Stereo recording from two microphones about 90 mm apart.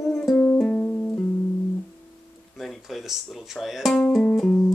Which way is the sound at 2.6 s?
Centre (ahead or behind).